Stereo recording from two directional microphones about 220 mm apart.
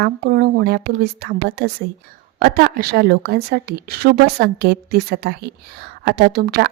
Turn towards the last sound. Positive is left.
turn(degrees=-45)  # may be behind; listen again after turning